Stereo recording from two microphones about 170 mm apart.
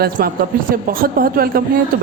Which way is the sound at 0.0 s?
55° right (ahead or behind).